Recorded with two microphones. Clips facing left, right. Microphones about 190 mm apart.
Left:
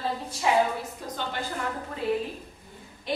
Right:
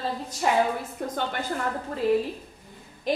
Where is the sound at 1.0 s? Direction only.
55° right (ahead or behind).